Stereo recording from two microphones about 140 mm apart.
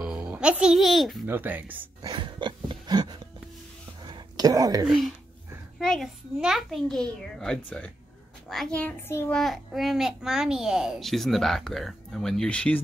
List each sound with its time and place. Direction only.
0.0 s a child's voice: 10° right (ahead or behind)
1.2 s speech: 15° right (ahead or behind)
2.0 s a sound: 30° right (ahead or behind)
4.8 s a child's voice: 5° right (ahead or behind); by 9.3 s 15° left (ahead or behind)
9.3 s a child's voice: centre (ahead or behind)